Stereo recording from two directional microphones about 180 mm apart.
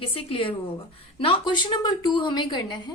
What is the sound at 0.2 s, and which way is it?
A woman's voice, 30° left (ahead or behind).